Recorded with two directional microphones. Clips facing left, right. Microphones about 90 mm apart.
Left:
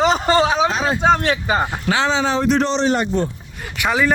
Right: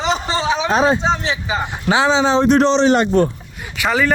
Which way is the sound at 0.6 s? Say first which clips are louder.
Right 5 dB; 35° right (ahead or behind).